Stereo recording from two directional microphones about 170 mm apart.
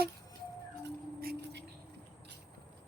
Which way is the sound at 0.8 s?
75° right (ahead or behind).